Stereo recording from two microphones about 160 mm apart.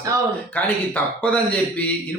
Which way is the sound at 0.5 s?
10° left (ahead or behind).